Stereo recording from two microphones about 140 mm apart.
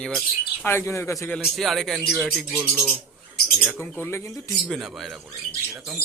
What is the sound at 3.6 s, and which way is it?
Speech, 10° left (ahead or behind).